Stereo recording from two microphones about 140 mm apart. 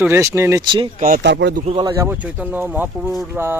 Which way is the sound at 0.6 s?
35° right (ahead or behind).